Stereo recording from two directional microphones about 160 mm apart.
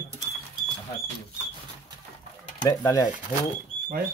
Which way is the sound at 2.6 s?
20° left (ahead or behind).